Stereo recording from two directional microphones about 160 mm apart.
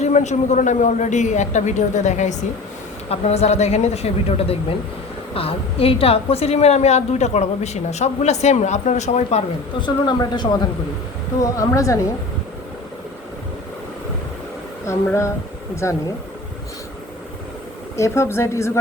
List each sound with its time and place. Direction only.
0.0 s a woman's voice: 45° left (ahead or behind)
9.8 s speech: 25° left (ahead or behind)
14.8 s speech: 15° left (ahead or behind)
17.9 s speech: 15° left (ahead or behind)